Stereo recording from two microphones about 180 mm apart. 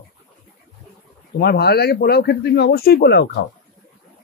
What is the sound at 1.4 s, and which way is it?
Speech, 65° left (ahead or behind).